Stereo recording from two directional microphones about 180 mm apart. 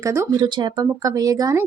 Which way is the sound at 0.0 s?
15° right (ahead or behind).